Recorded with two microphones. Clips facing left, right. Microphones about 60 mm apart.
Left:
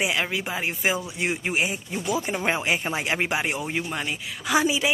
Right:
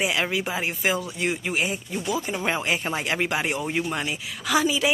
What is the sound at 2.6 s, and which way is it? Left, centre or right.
Speech, centre.